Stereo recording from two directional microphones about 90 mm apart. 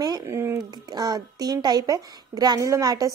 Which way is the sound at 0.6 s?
45° right (ahead or behind).